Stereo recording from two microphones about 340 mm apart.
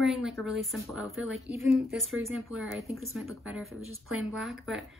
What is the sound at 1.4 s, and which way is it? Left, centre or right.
Speech, centre.